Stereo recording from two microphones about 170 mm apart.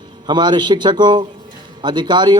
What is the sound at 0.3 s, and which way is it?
A man's voice, 25° right (ahead or behind).